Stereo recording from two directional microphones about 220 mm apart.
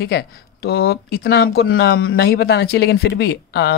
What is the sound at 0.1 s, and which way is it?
Speech, 45° left (ahead or behind).